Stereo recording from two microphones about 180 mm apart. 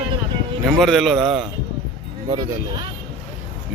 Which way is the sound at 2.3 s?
25° right (ahead or behind).